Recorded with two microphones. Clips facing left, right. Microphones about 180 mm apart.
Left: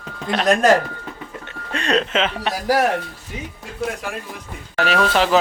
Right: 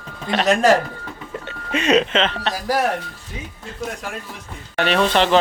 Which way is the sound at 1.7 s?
Centre (ahead or behind).